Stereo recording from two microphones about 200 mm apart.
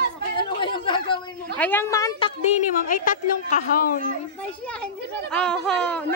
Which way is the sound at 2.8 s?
40° left (ahead or behind).